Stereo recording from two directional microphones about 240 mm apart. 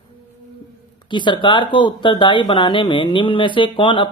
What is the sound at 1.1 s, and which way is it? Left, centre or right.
Speech, centre.